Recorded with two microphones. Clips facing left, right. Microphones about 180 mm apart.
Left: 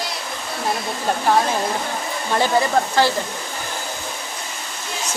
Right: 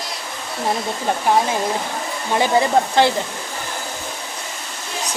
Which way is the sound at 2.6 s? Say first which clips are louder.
Right 4 dB; 20° right (ahead or behind).